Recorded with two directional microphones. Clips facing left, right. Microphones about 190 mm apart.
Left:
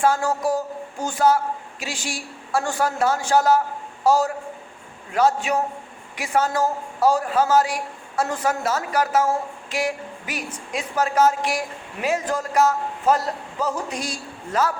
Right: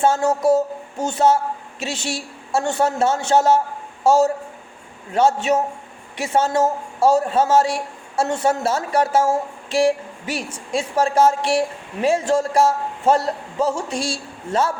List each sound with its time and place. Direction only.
0.0 s a man's voice: 25° right (ahead or behind)